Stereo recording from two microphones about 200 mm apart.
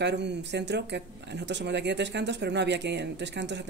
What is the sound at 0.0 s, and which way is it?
Speech, 60° right (ahead or behind).